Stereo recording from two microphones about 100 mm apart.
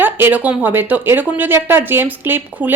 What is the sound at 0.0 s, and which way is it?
Speech, 20° right (ahead or behind).